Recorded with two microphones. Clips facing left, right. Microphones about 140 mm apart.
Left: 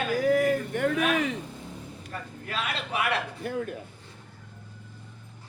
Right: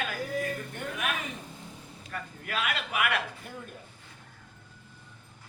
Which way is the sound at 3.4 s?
75° left (ahead or behind).